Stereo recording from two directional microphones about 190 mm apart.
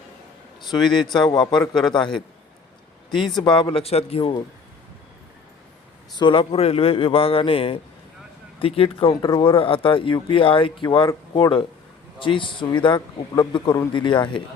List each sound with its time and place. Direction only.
0.6 s a man's voice: 25° left (ahead or behind)
6.1 s speech: 25° left (ahead or behind)